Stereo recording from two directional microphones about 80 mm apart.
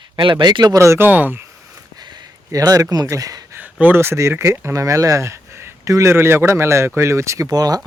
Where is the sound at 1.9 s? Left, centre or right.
Right.